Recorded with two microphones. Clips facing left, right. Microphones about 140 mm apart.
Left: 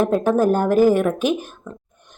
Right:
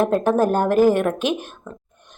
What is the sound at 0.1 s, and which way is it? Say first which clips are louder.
Speech: left 1 dB; 5° left (ahead or behind).